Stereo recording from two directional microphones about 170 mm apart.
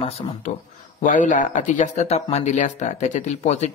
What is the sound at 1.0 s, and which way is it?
Speech, 50° left (ahead or behind).